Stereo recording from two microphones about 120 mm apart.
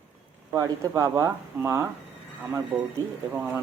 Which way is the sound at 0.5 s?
25° right (ahead or behind).